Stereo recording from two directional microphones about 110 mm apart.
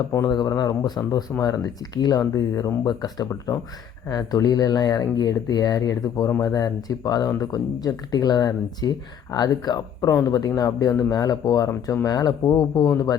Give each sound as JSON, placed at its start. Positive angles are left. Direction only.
{"t": 0.1, "sound": "speech", "side_deg": 35}